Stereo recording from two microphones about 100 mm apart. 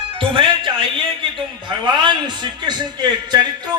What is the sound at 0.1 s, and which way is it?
A man's voice, 55° right (ahead or behind).